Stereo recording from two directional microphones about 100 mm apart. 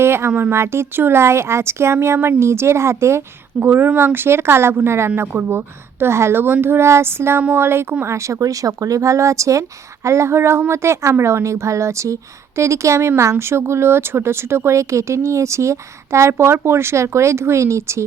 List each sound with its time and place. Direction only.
0.0 s speech: 25° right (ahead or behind)